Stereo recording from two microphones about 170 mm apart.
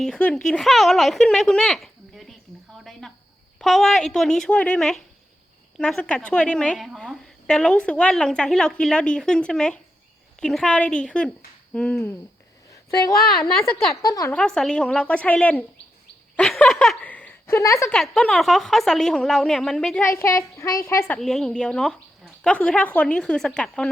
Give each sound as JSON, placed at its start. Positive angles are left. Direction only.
{"t": 0.0, "sound": "a woman's voice", "side_deg": 5}
{"t": 2.7, "sound": "a sound", "side_deg": 0}
{"t": 3.6, "sound": "a woman's voice", "side_deg": 0}
{"t": 13.4, "sound": "a woman's voice", "side_deg": 0}
{"t": 14.0, "sound": "speech", "side_deg": 20}
{"t": 14.3, "sound": "a woman's voice", "side_deg": 5}
{"t": 17.9, "sound": "a woman's voice", "side_deg": 5}
{"t": 20.1, "sound": "a woman's voice", "side_deg": 15}
{"t": 21.2, "sound": "a woman's voice", "side_deg": 5}